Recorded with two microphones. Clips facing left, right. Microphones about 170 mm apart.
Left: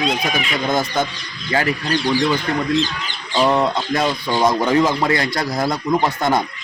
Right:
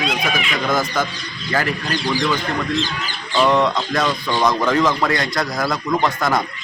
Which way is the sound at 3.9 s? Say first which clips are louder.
Left 1 dB; 25° left (ahead or behind).